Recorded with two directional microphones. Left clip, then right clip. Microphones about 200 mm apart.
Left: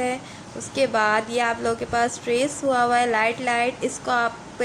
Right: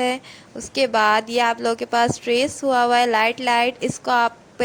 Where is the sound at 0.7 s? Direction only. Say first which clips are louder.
Right 3 dB; 45° right (ahead or behind).